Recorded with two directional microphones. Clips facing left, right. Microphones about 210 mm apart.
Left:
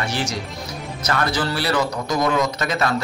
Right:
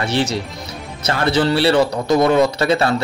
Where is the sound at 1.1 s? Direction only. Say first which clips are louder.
Right 6 dB; 25° right (ahead or behind).